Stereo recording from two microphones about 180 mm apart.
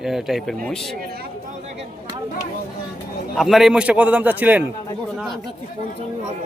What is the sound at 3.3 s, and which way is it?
Speech, centre (ahead or behind).